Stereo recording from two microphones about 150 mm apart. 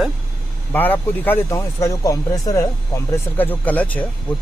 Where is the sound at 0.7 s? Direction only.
10° left (ahead or behind).